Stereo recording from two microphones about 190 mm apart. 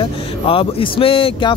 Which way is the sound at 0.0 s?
30° left (ahead or behind).